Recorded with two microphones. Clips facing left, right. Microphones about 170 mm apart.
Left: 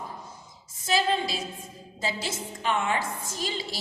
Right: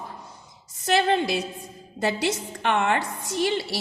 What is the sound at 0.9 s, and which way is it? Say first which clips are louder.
A woman's voice: right 4 dB; 70° right (ahead or behind).